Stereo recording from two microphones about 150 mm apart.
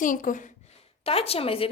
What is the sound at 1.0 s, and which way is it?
Speech, 40° left (ahead or behind).